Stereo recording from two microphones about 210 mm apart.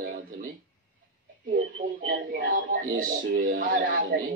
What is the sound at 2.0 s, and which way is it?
Speech, 40° right (ahead or behind).